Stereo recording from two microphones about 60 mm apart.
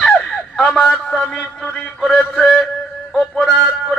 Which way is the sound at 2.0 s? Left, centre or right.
Centre.